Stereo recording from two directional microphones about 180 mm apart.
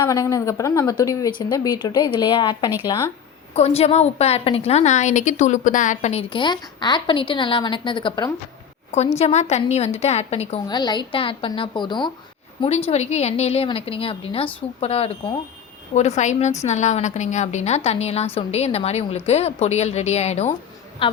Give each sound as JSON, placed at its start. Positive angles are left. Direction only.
{"t": 0.0, "sound": "a woman's voice", "side_deg": 20}
{"t": 3.5, "sound": "a woman's voice", "side_deg": 35}
{"t": 9.1, "sound": "a woman's voice", "side_deg": 35}
{"t": 10.7, "sound": "a woman's voice", "side_deg": 25}